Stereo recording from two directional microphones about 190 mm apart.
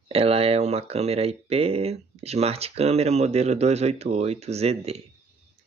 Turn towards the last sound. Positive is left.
turn(degrees=-30)  # may be behind; listen again after turning